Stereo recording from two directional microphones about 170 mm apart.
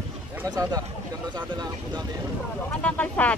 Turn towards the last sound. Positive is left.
turn(degrees=10)  # may be behind; listen again after turning